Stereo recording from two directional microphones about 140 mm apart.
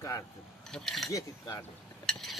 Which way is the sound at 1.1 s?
20° left (ahead or behind).